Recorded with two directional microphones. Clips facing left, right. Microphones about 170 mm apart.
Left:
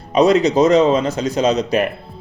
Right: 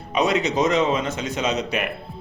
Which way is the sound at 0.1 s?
35° left (ahead or behind).